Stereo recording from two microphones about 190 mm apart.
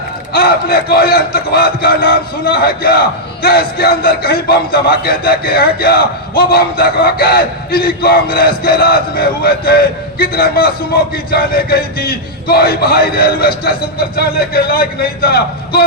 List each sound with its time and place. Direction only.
0.3 s a man's voice: 55° left (ahead or behind)